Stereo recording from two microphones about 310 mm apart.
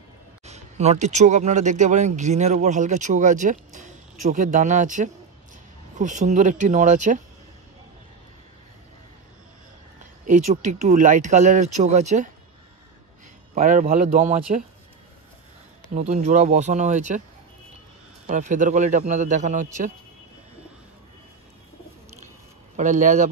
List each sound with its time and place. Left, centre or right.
0.5 s speech: right
10.2 s speech: right
13.6 s speech: right
15.9 s speech: right
18.2 s speech: right
22.8 s speech: right